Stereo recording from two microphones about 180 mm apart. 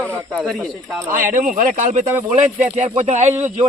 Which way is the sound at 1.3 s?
50° right (ahead or behind).